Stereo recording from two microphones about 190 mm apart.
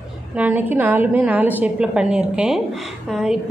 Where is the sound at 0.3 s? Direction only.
10° right (ahead or behind).